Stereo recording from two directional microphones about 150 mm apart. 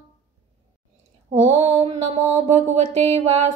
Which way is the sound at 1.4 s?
45° right (ahead or behind).